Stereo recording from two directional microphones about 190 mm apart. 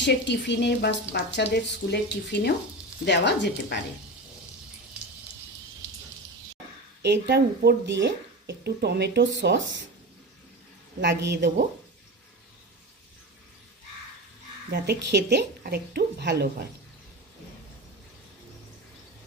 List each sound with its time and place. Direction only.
0.0 s a woman's voice: 65° left (ahead or behind)
7.0 s speech: 60° right (ahead or behind)
11.0 s speech: 65° right (ahead or behind)
14.7 s speech: 60° right (ahead or behind)